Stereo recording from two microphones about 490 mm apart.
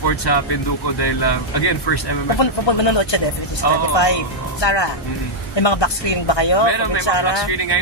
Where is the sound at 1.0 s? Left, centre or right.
Left.